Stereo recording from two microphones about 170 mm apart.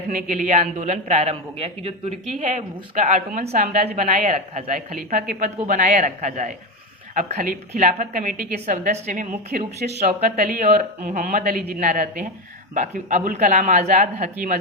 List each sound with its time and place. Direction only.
0.1 s a man's voice: 50° right (ahead or behind)
9.3 s a man's voice: 60° right (ahead or behind)